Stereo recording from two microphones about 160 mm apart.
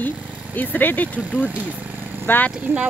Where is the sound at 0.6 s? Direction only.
10° left (ahead or behind).